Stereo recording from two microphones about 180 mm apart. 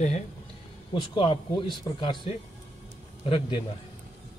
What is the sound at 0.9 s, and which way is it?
Speech, 30° left (ahead or behind).